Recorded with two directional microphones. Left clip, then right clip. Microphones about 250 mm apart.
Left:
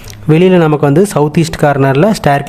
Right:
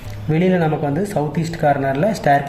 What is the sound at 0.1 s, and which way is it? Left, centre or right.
Speech, left.